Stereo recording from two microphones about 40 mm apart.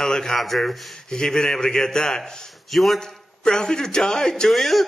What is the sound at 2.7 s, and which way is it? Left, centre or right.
Speech, centre.